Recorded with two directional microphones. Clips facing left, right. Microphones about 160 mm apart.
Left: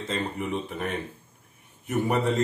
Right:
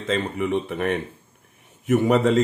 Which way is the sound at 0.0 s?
70° right (ahead or behind).